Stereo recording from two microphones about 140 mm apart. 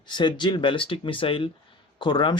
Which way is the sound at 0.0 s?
35° left (ahead or behind).